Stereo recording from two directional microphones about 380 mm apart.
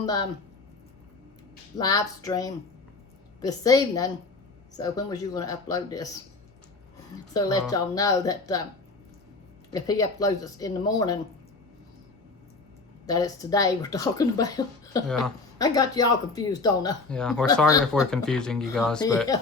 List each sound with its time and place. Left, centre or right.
0.0 s speech: centre
1.8 s speech: centre
7.3 s speech: centre
9.7 s speech: centre
13.1 s speech: centre